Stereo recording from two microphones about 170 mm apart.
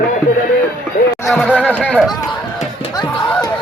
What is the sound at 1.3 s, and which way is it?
Chatter, 5° left (ahead or behind).